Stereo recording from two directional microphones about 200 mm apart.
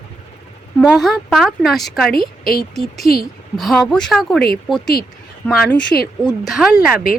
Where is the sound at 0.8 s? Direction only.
Centre (ahead or behind).